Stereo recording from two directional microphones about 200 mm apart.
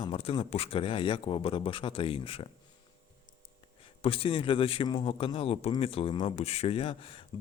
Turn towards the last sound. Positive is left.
turn(degrees=25)  # may be behind; listen again after turning